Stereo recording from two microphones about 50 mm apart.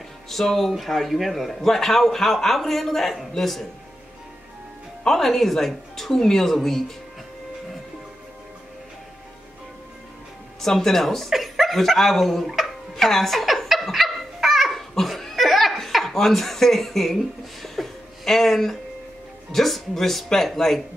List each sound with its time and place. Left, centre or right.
0.3 s speech: centre
5.0 s speech: centre
10.6 s speech: centre
12.9 s a sound: centre
19.5 s speech: centre